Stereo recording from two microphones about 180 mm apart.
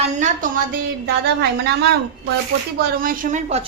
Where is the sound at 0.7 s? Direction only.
60° right (ahead or behind).